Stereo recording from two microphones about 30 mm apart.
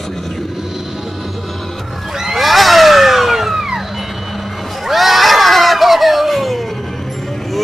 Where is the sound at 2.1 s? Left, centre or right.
Centre.